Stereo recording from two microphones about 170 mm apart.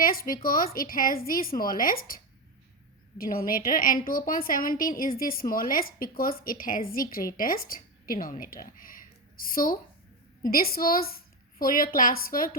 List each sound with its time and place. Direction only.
0.0 s a woman's voice: 55° left (ahead or behind)